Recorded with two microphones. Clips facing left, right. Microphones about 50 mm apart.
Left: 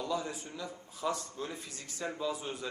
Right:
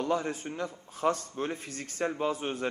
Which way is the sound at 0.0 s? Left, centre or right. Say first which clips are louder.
Right 6 dB; right.